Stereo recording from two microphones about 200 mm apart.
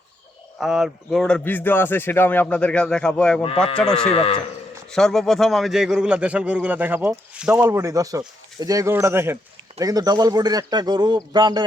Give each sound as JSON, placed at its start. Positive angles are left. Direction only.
{"t": 0.6, "sound": "a man's voice", "side_deg": 0}
{"t": 4.1, "sound": "speech", "side_deg": 30}
{"t": 4.9, "sound": "a man's voice", "side_deg": 5}